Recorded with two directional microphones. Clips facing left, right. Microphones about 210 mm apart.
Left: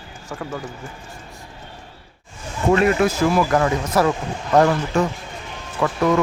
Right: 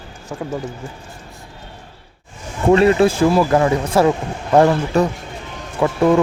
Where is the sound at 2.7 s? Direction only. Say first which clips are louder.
Right 4 dB; 30° right (ahead or behind).